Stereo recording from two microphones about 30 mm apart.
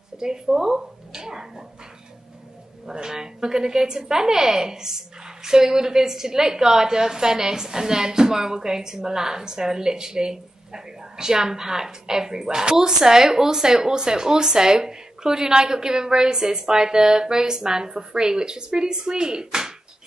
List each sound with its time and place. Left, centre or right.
0.5 s speech: right
2.9 s a woman's voice: right